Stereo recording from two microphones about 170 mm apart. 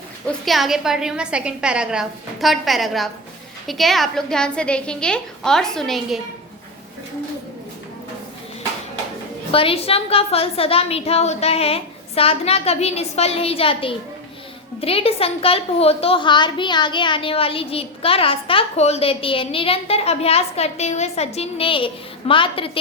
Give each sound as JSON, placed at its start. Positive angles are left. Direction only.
{"t": 0.3, "sound": "a woman's voice", "side_deg": 0}
{"t": 9.5, "sound": "a woman's voice", "side_deg": 35}